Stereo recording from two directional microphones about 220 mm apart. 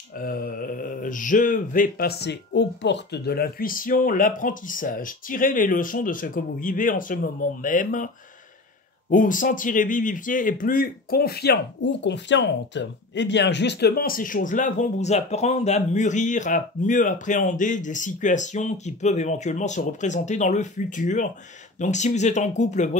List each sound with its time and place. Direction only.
0.2 s speech: 40° left (ahead or behind)
9.1 s speech: 35° left (ahead or behind)